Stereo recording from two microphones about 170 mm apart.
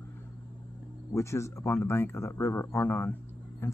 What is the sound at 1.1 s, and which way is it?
Speech, 15° left (ahead or behind).